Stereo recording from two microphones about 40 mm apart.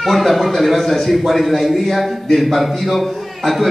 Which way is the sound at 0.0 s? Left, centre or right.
Centre.